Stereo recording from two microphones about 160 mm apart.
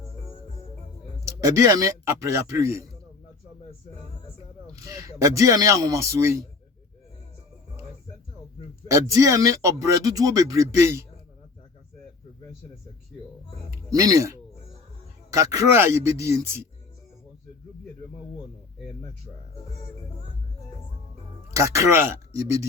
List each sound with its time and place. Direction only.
1.2 s speech: 20° right (ahead or behind)
4.6 s speech: 20° right (ahead or behind)
8.9 s speech: 20° right (ahead or behind)
13.9 s a man's voice: 20° right (ahead or behind)
21.5 s speech: 20° right (ahead or behind)